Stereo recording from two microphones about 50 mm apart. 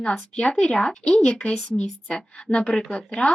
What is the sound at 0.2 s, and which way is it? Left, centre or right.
Speech, left.